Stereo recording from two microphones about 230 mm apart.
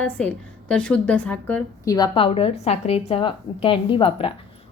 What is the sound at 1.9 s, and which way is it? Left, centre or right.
A woman's voice, centre.